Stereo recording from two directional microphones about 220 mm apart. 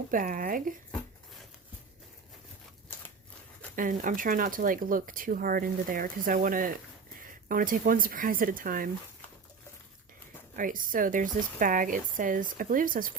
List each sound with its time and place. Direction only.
0.1 s speech: 40° right (ahead or behind)
3.8 s speech: 40° right (ahead or behind)
10.5 s speech: 40° right (ahead or behind)